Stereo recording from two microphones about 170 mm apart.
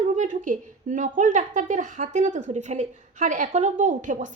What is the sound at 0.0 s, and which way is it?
A woman's voice, 45° right (ahead or behind).